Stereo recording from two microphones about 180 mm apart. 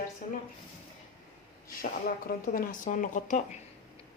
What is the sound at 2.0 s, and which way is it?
Speech, 50° left (ahead or behind).